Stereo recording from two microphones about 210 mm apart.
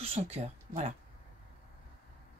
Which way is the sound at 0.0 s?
30° right (ahead or behind).